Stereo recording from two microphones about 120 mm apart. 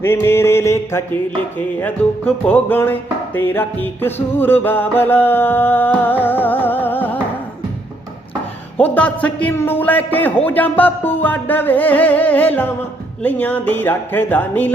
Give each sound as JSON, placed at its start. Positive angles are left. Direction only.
{"t": 0.0, "sound": "music", "side_deg": 20}
{"t": 8.8, "sound": "music", "side_deg": 10}